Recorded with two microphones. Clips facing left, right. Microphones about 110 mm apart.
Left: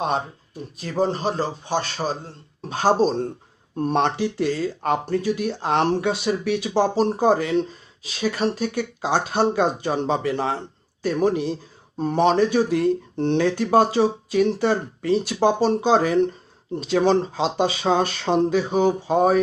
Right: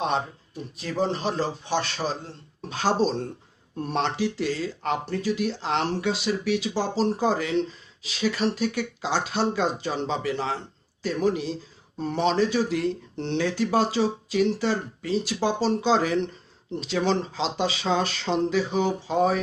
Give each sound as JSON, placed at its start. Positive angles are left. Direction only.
{"t": 0.8, "sound": "a man's voice", "side_deg": 40}